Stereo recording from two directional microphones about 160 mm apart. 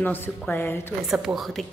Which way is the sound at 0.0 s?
15° left (ahead or behind).